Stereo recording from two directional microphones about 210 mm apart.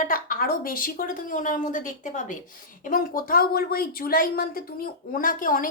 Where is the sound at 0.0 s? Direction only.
40° left (ahead or behind).